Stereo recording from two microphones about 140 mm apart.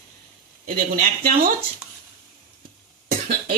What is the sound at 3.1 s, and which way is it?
Cough, 85° right.